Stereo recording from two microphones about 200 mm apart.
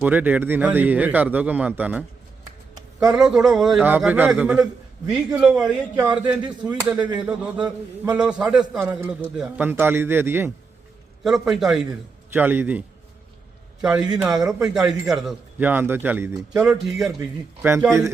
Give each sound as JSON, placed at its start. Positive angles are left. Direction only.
{"t": 0.0, "sound": "a man's voice", "side_deg": -10}
{"t": 14.1, "sound": "a man's voice", "side_deg": -5}